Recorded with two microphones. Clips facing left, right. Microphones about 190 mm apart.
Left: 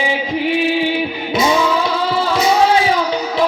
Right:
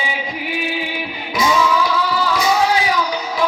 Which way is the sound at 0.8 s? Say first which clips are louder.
Left 8 dB; 25° left (ahead or behind).